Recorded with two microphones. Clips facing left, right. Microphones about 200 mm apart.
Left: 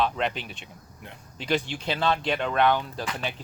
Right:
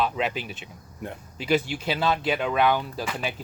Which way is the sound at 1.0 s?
45° right (ahead or behind).